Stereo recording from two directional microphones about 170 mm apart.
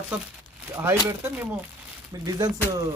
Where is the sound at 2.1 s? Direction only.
20° right (ahead or behind).